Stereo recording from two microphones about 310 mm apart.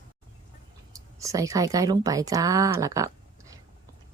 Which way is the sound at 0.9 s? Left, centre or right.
Centre.